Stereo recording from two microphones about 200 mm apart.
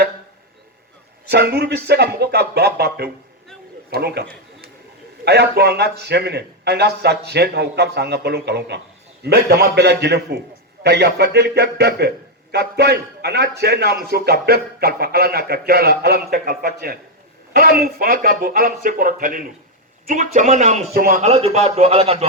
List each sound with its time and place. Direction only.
1.3 s a man's voice: 55° right (ahead or behind)
3.8 s a sound: 55° right (ahead or behind)
5.2 s a man's voice: 55° right (ahead or behind); by 22.3 s 30° right (ahead or behind)